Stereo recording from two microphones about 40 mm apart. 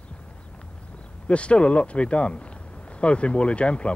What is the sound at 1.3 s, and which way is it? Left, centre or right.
Speech, left.